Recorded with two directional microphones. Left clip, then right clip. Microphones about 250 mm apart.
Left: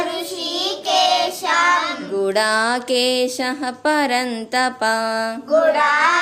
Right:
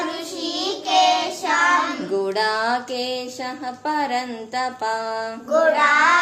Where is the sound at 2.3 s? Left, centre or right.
Left.